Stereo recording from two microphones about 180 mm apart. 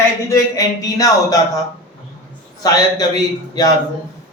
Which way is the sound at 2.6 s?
20° left (ahead or behind).